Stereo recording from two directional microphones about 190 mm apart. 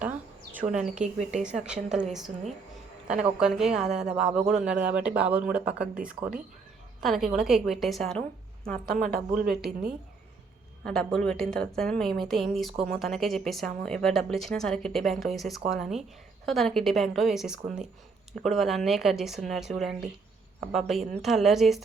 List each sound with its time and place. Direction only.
0.5 s speech: 5° right (ahead or behind)
3.2 s speech: 5° right (ahead or behind)
9.0 s speech: 50° right (ahead or behind)
10.8 s speech: 5° left (ahead or behind)